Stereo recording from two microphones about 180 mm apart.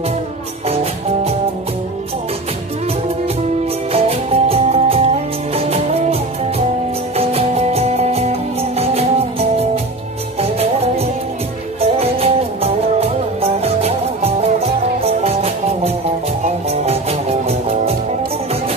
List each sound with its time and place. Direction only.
3.9 s music: 35° right (ahead or behind)
7.2 s music: 35° right (ahead or behind)